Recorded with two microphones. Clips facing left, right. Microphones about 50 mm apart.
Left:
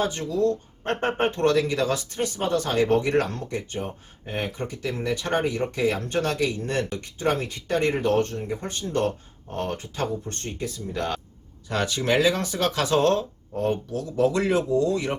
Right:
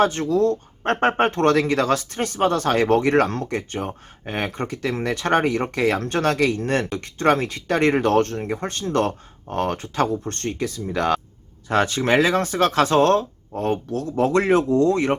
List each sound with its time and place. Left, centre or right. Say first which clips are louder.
0.0 s speech: right 5 dB; right
11.7 s speech: right 5 dB; right